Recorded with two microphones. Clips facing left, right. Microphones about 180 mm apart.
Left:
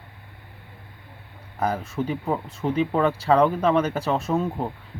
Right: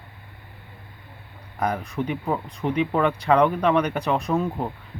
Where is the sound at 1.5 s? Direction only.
30° left (ahead or behind).